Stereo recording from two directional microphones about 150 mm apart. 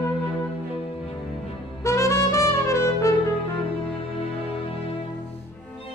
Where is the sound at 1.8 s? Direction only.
20° left (ahead or behind).